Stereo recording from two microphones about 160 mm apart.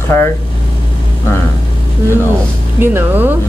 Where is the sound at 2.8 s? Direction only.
10° right (ahead or behind).